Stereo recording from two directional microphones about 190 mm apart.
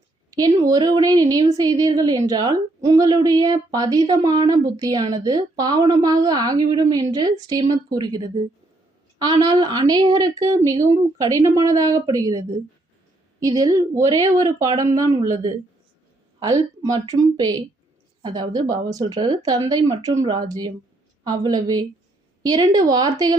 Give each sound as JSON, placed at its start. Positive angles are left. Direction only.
{"t": 0.3, "sound": "a woman's voice", "side_deg": -20}